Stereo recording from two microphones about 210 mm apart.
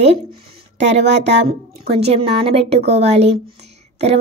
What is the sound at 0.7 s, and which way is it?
Speech, 55° right (ahead or behind).